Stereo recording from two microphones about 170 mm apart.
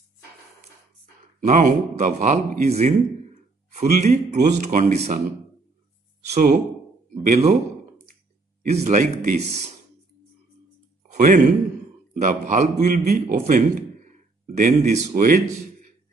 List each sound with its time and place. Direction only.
1.4 s a man's voice: 50° right (ahead or behind)
6.3 s a man's voice: 45° right (ahead or behind)
8.6 s speech: 45° right (ahead or behind)
11.1 s speech: 50° right (ahead or behind)
12.7 s speech: 60° right (ahead or behind)
13.6 s speech: 45° right (ahead or behind)